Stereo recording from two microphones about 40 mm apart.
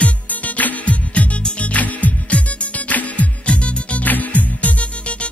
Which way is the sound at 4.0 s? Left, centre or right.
Left.